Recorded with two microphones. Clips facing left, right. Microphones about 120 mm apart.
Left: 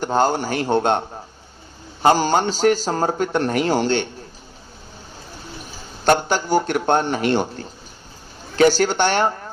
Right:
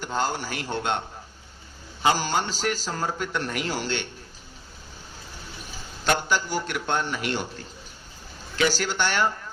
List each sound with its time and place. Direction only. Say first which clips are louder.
0.0 s a man's voice: left 9 dB; 50° left (ahead or behind)
6.1 s a man's voice: left 7 dB; 50° left (ahead or behind)